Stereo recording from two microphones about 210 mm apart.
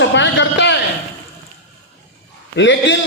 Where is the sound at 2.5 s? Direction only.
60° left (ahead or behind).